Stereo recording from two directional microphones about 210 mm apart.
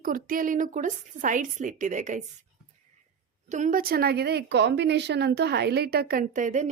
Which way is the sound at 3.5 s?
35° right (ahead or behind).